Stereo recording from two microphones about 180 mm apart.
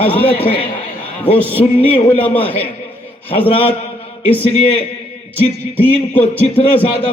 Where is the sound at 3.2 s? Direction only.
30° left (ahead or behind).